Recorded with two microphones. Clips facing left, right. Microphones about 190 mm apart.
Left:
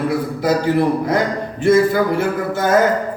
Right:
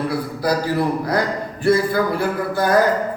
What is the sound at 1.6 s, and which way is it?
Speech, 20° left (ahead or behind).